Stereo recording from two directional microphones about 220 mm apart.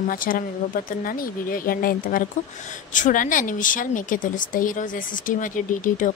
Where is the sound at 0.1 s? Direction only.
40° left (ahead or behind).